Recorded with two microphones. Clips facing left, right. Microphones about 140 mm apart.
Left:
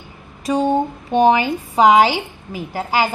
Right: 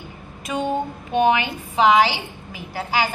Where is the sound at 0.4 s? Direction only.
35° left (ahead or behind).